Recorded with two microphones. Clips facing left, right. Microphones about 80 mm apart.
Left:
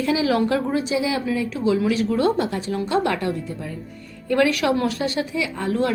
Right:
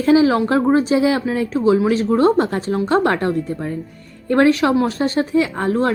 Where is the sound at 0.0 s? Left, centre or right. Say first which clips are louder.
Right 6 dB; right.